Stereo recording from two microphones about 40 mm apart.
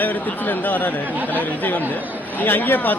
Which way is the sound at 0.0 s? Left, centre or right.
Left.